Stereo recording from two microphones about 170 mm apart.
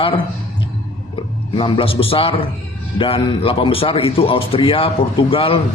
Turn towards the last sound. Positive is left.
turn(degrees=30)  # may be behind; listen again after turning